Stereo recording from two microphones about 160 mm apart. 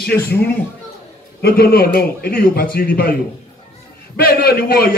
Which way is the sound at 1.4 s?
70° left (ahead or behind).